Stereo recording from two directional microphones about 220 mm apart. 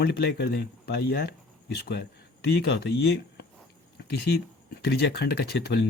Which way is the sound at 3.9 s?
50° left (ahead or behind).